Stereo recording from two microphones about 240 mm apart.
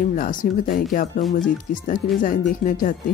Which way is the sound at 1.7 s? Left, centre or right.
Left.